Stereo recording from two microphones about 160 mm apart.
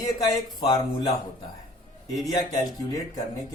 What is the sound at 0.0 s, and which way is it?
Speech, 20° left (ahead or behind).